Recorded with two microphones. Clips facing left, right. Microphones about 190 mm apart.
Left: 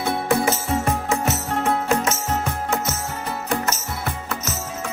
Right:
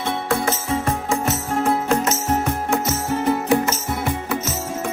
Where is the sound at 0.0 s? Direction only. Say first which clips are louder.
Left 1 dB; 10° left (ahead or behind).